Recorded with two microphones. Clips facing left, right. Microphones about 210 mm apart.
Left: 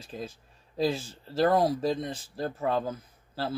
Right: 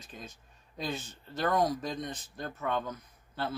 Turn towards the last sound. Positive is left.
turn(degrees=30)  # may be behind; listen again after turning